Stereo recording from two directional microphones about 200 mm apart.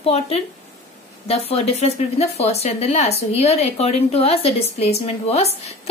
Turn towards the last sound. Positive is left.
turn(degrees=30)  # may be behind; listen again after turning